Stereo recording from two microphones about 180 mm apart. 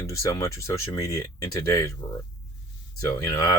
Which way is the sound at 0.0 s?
20° left (ahead or behind).